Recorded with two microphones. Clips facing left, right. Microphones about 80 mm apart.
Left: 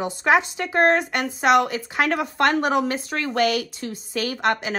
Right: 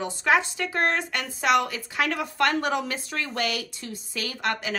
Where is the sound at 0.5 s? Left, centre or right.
Left.